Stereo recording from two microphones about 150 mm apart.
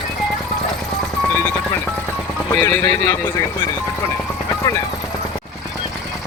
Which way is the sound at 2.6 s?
15° left (ahead or behind).